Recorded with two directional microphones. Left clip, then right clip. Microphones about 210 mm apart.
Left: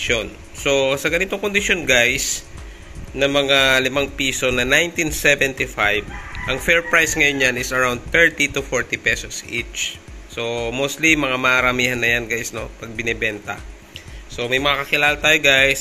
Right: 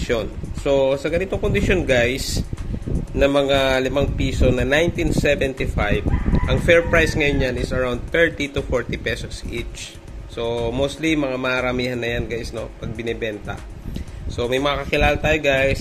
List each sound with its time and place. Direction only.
0.1 s speech: 15° right (ahead or behind)
3.2 s a man's voice: 20° right (ahead or behind)
14.3 s speech: 20° right (ahead or behind); by 15.8 s 5° right (ahead or behind)